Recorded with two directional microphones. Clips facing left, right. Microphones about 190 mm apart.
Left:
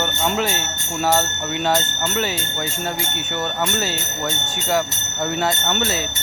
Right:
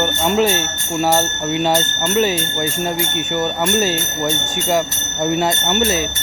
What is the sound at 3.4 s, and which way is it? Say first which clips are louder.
Speech: right 5 dB; 20° right (ahead or behind).